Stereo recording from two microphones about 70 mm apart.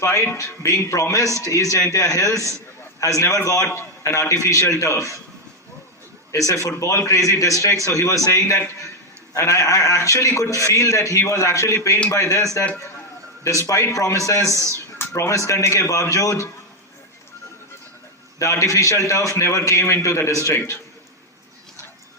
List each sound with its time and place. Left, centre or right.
0.3 s a man's voice: left
6.3 s a man's voice: left
18.3 s a man's voice: left